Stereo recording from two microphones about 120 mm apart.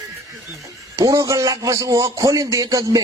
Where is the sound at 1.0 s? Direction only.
25° right (ahead or behind).